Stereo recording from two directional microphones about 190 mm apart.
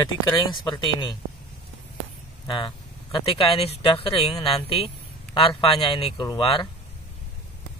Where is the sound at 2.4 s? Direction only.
25° left (ahead or behind).